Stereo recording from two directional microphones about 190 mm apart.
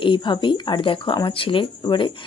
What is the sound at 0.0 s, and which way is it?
Speech, 25° left (ahead or behind).